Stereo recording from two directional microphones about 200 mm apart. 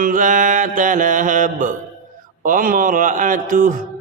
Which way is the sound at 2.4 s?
40° right (ahead or behind).